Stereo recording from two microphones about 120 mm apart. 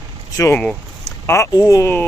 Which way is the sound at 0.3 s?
25° left (ahead or behind).